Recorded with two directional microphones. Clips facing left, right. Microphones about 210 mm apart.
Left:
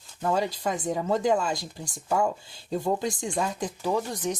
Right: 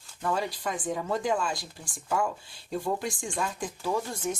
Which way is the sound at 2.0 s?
25° left (ahead or behind).